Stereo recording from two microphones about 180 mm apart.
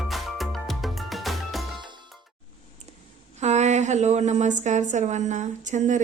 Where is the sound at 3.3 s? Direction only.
40° right (ahead or behind).